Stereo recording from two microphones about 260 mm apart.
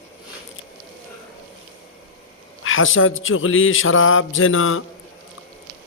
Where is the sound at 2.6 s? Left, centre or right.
Left.